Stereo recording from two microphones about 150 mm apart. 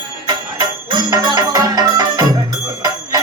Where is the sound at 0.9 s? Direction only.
30° right (ahead or behind).